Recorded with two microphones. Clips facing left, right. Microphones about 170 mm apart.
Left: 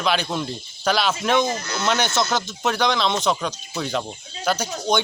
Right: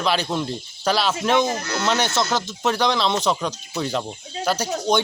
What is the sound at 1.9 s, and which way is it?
Speech, 30° right (ahead or behind).